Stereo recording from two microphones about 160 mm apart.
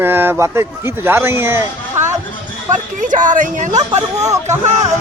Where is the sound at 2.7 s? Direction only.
55° right (ahead or behind).